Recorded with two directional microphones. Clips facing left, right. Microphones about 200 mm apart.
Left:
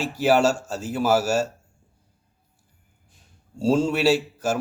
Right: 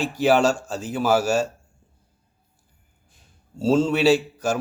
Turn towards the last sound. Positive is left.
turn(degrees=5)  # may be behind; listen again after turning